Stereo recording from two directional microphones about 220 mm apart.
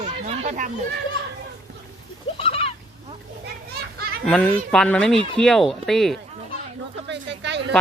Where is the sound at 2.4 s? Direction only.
25° left (ahead or behind).